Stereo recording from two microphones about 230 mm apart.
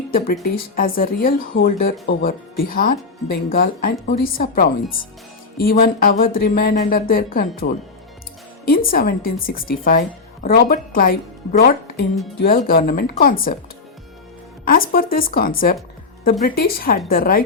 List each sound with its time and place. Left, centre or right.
0.5 s speech: left
8.6 s speech: left
14.6 s speech: left